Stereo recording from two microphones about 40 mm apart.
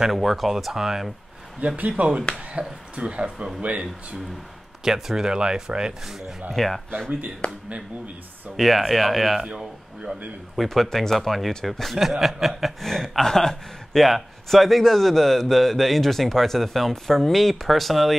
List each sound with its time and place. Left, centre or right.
0.1 s a man's voice: centre
1.9 s speech: right
4.8 s speech: centre
6.0 s speech: centre
6.5 s speech: centre
8.5 s a man's voice: centre
9.4 s speech: centre
10.5 s a man's voice: centre
12.8 s a man's voice: centre